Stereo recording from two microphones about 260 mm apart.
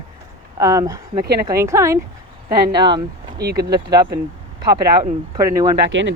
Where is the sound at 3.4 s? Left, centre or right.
Right.